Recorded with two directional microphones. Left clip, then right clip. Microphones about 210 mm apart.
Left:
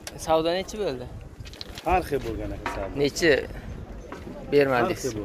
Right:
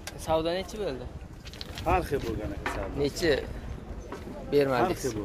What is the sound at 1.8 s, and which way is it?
Speech, 50° left (ahead or behind).